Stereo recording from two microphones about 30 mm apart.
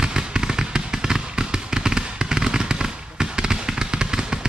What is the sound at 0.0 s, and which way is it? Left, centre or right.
Fireworks, right.